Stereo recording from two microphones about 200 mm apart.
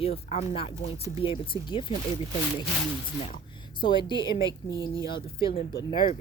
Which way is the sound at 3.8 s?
25° left (ahead or behind).